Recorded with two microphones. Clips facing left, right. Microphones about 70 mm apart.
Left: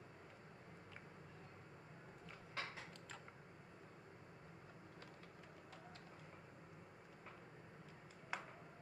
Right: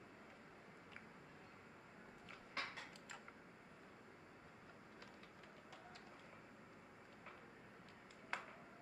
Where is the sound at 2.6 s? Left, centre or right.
Right.